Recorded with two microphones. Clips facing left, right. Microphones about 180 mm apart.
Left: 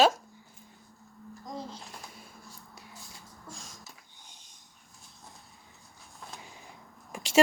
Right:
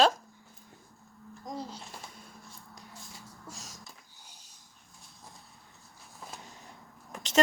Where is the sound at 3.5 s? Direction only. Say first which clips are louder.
Left 2 dB; 5° right (ahead or behind).